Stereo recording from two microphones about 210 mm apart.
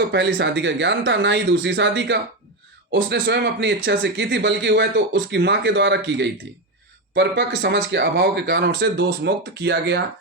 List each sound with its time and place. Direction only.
0.1 s speech: 55° right (ahead or behind)